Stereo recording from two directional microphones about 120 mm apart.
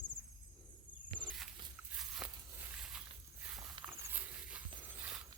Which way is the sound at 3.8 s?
45° right (ahead or behind).